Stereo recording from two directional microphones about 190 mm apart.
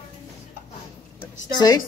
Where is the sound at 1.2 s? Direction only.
20° left (ahead or behind).